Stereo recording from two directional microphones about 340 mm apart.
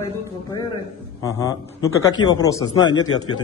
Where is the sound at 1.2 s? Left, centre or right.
Centre.